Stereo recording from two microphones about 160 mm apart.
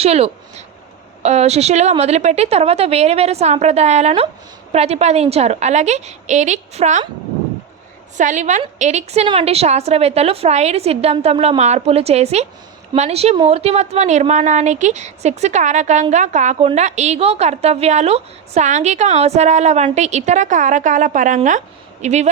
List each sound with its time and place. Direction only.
0.0 s a woman's voice: 40° right (ahead or behind)
8.2 s a woman's voice: 50° right (ahead or behind)